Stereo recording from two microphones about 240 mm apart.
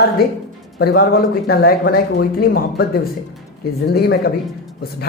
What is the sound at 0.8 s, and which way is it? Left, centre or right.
Speech, left.